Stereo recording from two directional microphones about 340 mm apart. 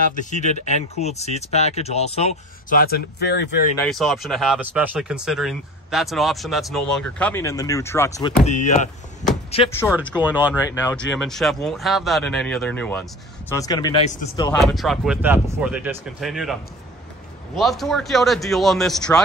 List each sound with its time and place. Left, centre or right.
0.0 s speech: left
3.7 s speech: centre
8.4 s speech: left
9.9 s speech: centre
10.6 s speech: centre
14.6 s speech: centre
17.6 s speech: centre